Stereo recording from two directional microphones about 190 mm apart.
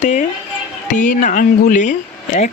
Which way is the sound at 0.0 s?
40° left (ahead or behind).